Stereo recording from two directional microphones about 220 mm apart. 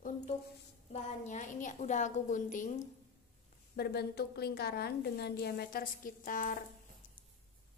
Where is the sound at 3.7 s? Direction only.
45° left (ahead or behind).